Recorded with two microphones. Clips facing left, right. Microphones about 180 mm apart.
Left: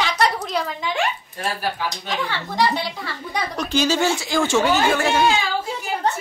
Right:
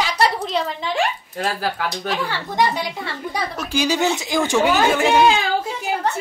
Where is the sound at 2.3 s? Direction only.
15° right (ahead or behind).